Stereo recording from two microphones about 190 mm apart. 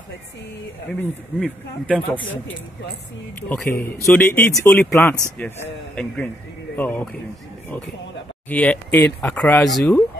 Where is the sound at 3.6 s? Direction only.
50° left (ahead or behind).